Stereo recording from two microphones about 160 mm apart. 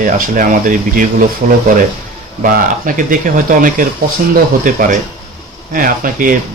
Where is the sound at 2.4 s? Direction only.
60° right (ahead or behind).